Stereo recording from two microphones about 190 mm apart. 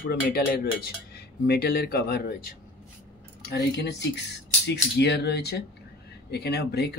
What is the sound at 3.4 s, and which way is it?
Speech, 60° left (ahead or behind).